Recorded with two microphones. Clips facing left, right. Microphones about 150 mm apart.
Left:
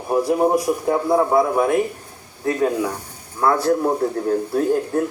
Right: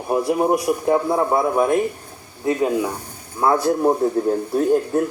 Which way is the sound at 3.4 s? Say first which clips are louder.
Right 1 dB; 20° right (ahead or behind).